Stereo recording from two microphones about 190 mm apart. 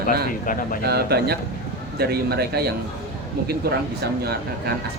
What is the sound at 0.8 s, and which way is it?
Speech, 55° right (ahead or behind).